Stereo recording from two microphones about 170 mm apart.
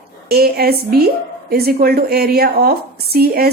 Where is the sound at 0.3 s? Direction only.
65° right (ahead or behind).